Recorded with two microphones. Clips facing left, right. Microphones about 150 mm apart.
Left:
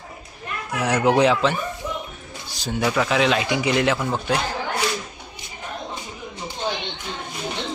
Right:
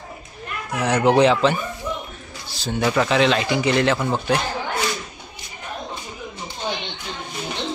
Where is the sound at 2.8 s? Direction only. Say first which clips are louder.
Right 2 dB; centre (ahead or behind).